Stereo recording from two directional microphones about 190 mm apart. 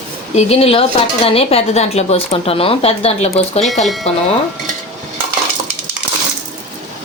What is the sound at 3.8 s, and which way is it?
Speech, centre (ahead or behind).